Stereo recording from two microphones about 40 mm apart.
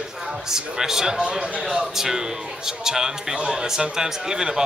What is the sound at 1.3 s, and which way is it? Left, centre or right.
Speech, right.